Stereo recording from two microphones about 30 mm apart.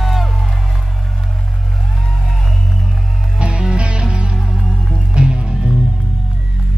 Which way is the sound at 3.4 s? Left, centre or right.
Right.